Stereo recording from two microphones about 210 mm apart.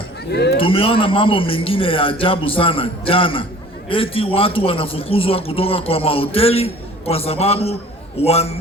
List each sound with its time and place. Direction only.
0.3 s speech: 55° left (ahead or behind)
0.5 s a man's voice: 25° left (ahead or behind)